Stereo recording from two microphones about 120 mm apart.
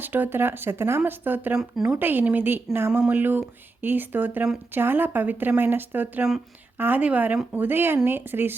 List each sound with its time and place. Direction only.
0.0 s speech: 15° right (ahead or behind)